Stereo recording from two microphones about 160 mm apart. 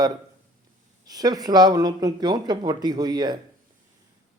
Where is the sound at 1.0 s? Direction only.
25° right (ahead or behind).